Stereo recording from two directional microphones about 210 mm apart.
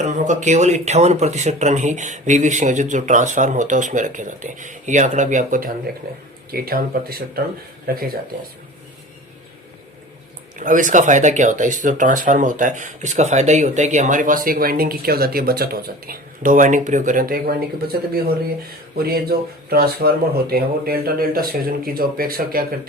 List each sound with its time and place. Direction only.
0.0 s speech: 35° right (ahead or behind)
10.6 s speech: 40° right (ahead or behind)